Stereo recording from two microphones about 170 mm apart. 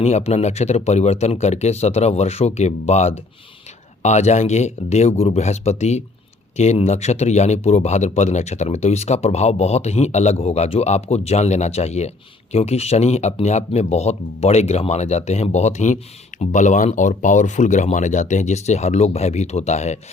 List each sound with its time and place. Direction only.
0.0 s speech: 40° left (ahead or behind)